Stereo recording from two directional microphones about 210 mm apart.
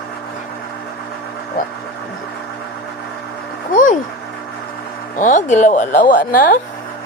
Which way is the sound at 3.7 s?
40° left (ahead or behind).